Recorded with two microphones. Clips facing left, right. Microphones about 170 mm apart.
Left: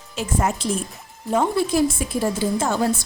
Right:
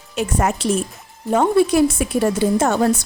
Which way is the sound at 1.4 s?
60° right (ahead or behind).